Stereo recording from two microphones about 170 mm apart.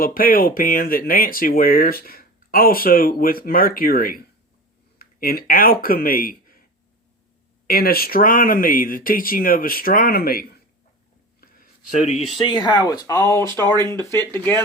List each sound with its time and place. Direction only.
0.0 s speech: 55° left (ahead or behind)
7.7 s speech: 60° left (ahead or behind)
11.3 s a sound: 55° left (ahead or behind)
12.4 s speech: 25° left (ahead or behind)